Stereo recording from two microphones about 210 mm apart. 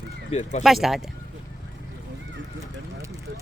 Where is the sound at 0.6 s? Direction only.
Centre (ahead or behind).